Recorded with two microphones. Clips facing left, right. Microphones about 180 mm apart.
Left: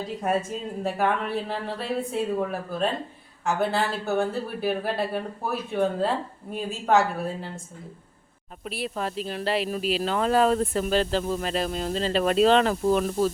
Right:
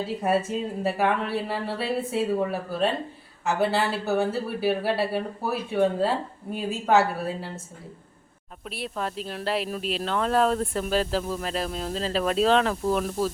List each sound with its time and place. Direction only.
0.0 s speech: 5° right (ahead or behind)
8.6 s speech: centre (ahead or behind)